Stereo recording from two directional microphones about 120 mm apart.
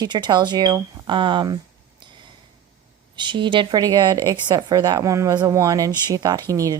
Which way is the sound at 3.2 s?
40° right (ahead or behind).